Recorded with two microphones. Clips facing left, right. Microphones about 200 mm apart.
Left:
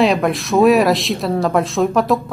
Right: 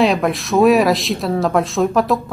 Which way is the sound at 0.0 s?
Centre (ahead or behind).